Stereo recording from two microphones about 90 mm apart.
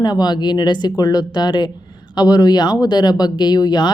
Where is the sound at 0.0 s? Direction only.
50° left (ahead or behind).